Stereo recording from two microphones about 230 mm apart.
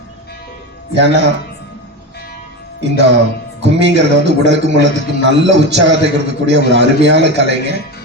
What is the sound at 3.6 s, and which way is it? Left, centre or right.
A man's voice, right.